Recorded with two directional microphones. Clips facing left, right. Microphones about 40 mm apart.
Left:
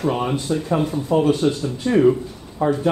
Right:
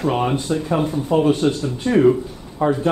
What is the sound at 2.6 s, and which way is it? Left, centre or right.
Speech, right.